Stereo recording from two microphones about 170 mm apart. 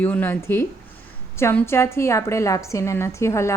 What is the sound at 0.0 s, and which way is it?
A woman's voice, 10° left (ahead or behind).